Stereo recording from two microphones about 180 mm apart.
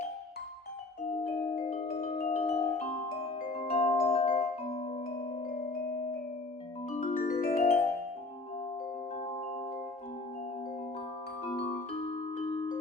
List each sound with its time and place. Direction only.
1.5 s music: 30° left (ahead or behind)
6.9 s music: 45° left (ahead or behind)